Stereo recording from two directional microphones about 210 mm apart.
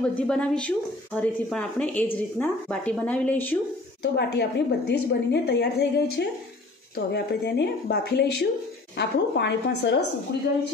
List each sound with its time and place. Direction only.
0.0 s a woman's voice: 5° left (ahead or behind)
4.0 s a woman's voice: 50° left (ahead or behind)